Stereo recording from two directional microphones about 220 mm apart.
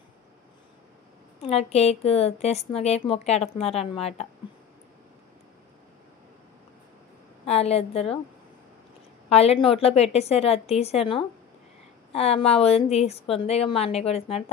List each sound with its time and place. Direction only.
1.4 s a woman's voice: 30° left (ahead or behind)
7.4 s a woman's voice: 30° left (ahead or behind)
9.3 s a woman's voice: 30° left (ahead or behind)